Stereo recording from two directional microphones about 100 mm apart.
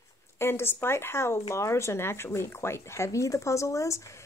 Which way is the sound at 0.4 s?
25° left (ahead or behind).